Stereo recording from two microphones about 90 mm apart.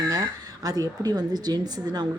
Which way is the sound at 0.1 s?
45° right (ahead or behind).